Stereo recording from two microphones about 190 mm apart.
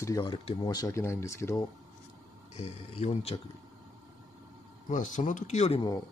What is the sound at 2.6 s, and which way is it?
Speech, 35° left (ahead or behind).